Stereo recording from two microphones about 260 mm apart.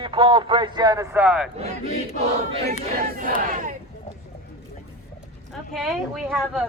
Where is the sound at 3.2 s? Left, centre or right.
Right.